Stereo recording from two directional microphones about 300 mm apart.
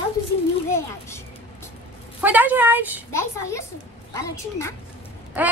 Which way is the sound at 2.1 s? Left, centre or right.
Centre.